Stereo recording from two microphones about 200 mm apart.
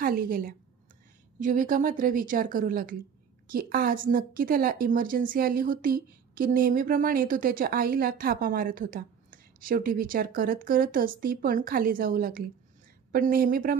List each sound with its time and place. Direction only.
0.0 s a woman's voice: 45° right (ahead or behind)